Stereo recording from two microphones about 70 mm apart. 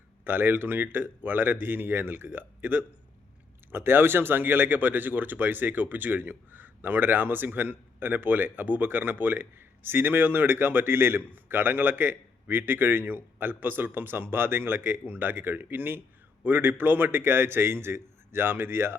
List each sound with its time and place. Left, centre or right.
0.3 s a man's voice: right